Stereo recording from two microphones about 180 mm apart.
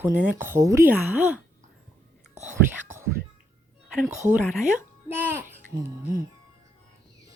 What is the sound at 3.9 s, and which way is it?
A child's voice, 5° right (ahead or behind).